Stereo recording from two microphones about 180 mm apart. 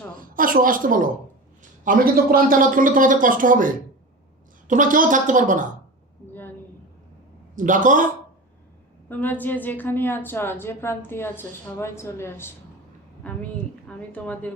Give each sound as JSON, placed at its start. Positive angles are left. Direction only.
{"t": 0.1, "sound": "a sound", "side_deg": -50}
{"t": 1.8, "sound": "speech", "side_deg": -50}
{"t": 4.7, "sound": "speech", "side_deg": -45}
{"t": 7.5, "sound": "speech", "side_deg": -45}
{"t": 9.0, "sound": "a woman's voice", "side_deg": 10}